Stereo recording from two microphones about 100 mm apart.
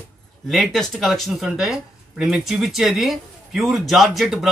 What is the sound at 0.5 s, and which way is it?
Speech, centre (ahead or behind).